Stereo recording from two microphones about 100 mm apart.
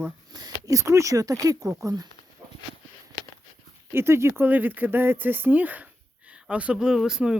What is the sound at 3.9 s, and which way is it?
Speech, 25° right (ahead or behind).